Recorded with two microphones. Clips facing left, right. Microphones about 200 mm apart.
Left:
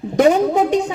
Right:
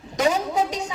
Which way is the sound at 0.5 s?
35° left (ahead or behind).